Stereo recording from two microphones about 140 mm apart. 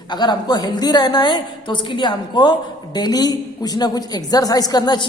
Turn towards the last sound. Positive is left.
turn(degrees=30)  # may be behind; listen again after turning